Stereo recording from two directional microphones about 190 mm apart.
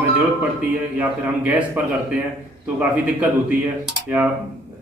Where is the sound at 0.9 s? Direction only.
5° right (ahead or behind).